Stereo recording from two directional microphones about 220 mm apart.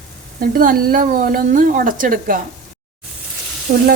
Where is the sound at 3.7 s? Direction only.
40° right (ahead or behind).